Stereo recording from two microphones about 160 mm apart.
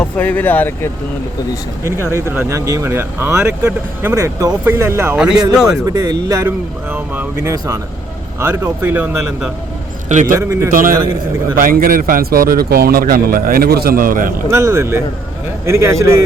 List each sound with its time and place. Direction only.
0.0 s speech: 10° left (ahead or behind)
1.8 s speech: 15° right (ahead or behind)
5.8 s speech: 25° right (ahead or behind)
6.9 s speech: 10° right (ahead or behind)
10.1 s a man's voice: 50° right (ahead or behind)
10.3 s speech: 15° right (ahead or behind)
10.7 s a man's voice: 60° right (ahead or behind)
14.5 s speech: 20° right (ahead or behind)